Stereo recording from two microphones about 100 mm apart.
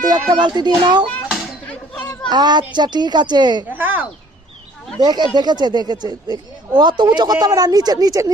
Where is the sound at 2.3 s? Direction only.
45° right (ahead or behind).